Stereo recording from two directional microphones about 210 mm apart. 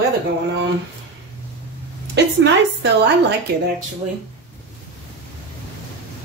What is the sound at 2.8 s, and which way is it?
Speech, 55° right (ahead or behind).